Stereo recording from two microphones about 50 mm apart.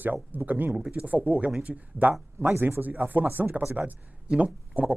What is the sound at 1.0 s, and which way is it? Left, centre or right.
A man's voice, right.